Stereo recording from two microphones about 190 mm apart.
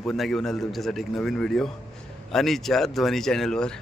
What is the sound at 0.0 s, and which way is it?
A man's voice, centre (ahead or behind).